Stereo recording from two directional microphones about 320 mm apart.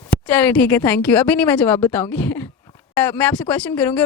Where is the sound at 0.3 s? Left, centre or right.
Centre.